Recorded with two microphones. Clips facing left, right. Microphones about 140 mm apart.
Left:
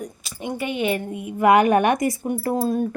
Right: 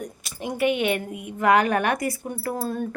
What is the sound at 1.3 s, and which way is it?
Speech, 15° left (ahead or behind).